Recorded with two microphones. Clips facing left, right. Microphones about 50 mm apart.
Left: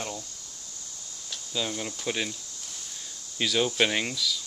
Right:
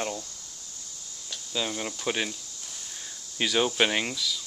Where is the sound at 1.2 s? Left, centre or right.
Centre.